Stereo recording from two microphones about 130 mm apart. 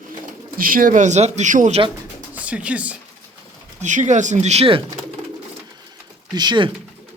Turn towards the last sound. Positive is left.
turn(degrees=-35)  # may be behind; listen again after turning